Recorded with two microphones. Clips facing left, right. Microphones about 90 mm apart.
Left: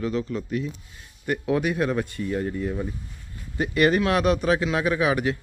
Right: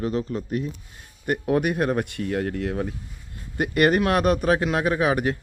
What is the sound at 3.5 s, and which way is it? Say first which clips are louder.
Speech: right 1 dB; 55° right (ahead or behind).